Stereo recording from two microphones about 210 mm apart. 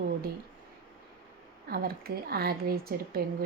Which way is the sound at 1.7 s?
45° right (ahead or behind).